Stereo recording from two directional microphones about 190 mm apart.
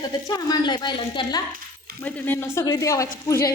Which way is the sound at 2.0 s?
10° left (ahead or behind).